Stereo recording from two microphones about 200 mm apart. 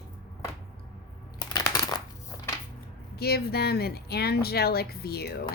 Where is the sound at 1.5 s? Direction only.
20° left (ahead or behind).